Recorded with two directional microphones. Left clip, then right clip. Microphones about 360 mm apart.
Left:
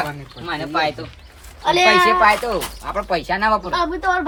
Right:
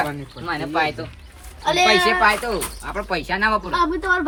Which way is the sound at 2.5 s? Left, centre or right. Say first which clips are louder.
Left 3 dB; left.